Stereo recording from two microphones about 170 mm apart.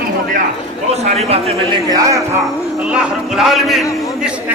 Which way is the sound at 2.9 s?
5° right (ahead or behind).